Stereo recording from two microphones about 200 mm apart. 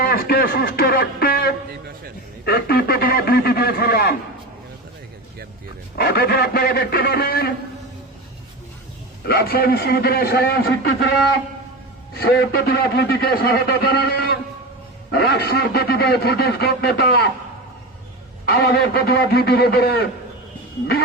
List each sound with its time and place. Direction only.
0.0 s speech: 50° left (ahead or behind)
2.4 s a sound: 50° left (ahead or behind)
6.0 s a man's voice: 50° left (ahead or behind)
9.2 s a man's voice: 50° left (ahead or behind)
12.1 s a man's voice: 50° left (ahead or behind)
18.4 s a man's voice: 50° left (ahead or behind)